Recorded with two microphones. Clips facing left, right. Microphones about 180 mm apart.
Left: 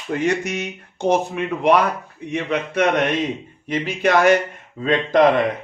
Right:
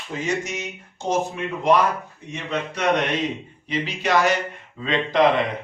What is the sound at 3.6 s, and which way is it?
Speech, 50° left (ahead or behind).